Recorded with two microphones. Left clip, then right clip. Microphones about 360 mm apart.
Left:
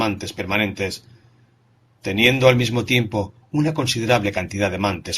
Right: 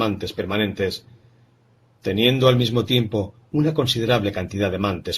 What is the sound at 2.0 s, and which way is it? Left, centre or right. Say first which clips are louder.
Speech: left 2 dB; centre.